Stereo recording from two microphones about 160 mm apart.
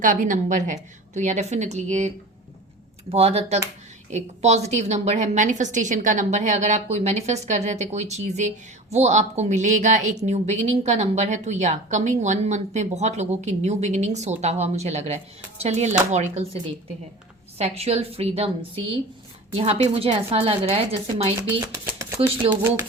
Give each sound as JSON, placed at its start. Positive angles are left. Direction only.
{"t": 0.0, "sound": "a woman's voice", "side_deg": -55}
{"t": 3.1, "sound": "a woman's voice", "side_deg": -40}
{"t": 17.6, "sound": "speech", "side_deg": -40}
{"t": 19.5, "sound": "speech", "side_deg": -40}
{"t": 21.6, "sound": "speech", "side_deg": -20}